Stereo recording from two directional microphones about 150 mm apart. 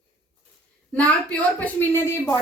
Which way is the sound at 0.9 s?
10° left (ahead or behind).